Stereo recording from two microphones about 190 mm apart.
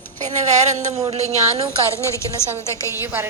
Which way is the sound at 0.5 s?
35° right (ahead or behind).